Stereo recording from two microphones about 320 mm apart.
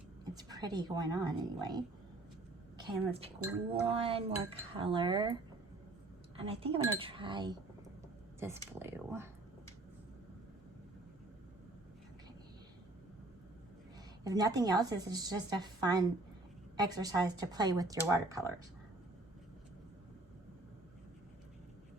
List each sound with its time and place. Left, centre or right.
0.3 s speech: centre
14.3 s speech: centre